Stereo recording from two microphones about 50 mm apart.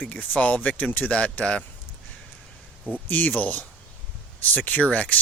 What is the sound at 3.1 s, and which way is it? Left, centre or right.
Speech, left.